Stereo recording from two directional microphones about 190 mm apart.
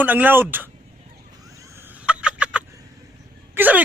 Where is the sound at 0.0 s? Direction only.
10° right (ahead or behind).